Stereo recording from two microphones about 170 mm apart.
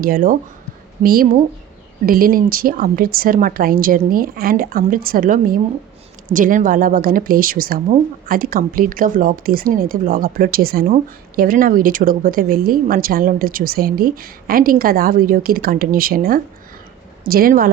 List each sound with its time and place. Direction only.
0.0 s a woman's voice: 55° right (ahead or behind)